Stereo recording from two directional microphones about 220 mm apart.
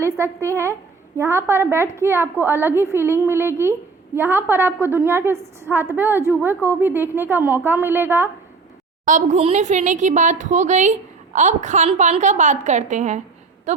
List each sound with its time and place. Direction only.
0.0 s a woman's voice: 10° right (ahead or behind)
9.0 s a woman's voice: 35° right (ahead or behind)